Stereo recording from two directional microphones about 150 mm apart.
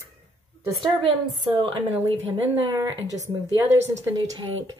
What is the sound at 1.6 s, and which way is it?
Speech, 35° right (ahead or behind).